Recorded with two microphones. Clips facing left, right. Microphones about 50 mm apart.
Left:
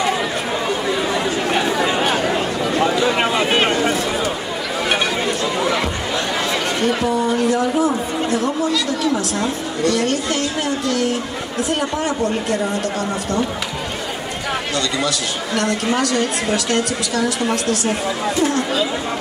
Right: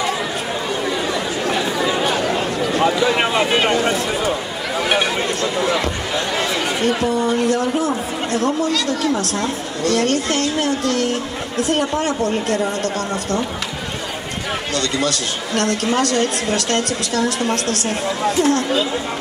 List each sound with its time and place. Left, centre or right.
1.5 s chatter: left
6.9 s a woman's voice: centre
7.4 s a woman's voice: centre
9.9 s speech: right
11.8 s a woman's voice: centre
15.5 s a woman's voice: centre